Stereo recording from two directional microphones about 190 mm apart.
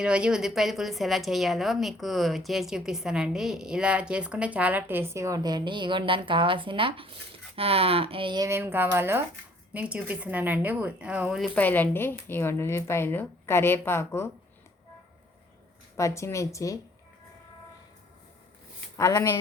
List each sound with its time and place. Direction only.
0.0 s a woman's voice: 5° right (ahead or behind)
11.5 s a woman's voice: 10° left (ahead or behind)
16.0 s a woman's voice: 15° left (ahead or behind)
18.9 s a woman's voice: 20° left (ahead or behind)